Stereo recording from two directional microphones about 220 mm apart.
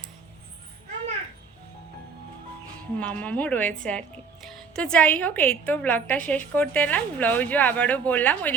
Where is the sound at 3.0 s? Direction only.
5° left (ahead or behind).